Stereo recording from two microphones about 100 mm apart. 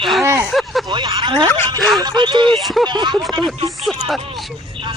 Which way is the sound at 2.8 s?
50° right (ahead or behind).